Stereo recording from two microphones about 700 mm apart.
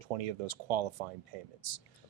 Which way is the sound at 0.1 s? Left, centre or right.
Right.